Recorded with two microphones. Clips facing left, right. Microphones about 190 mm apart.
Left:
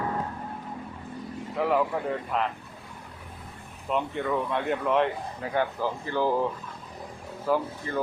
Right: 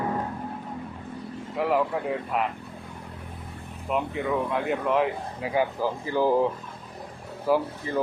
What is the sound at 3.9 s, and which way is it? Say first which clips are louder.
Speech: right 1 dB; 5° right (ahead or behind).